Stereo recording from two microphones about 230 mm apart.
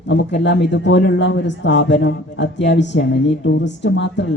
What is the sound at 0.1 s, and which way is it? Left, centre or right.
A man's voice, left.